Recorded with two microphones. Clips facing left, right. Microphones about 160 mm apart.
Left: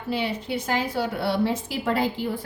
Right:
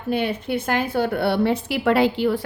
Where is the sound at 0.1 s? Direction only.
55° right (ahead or behind).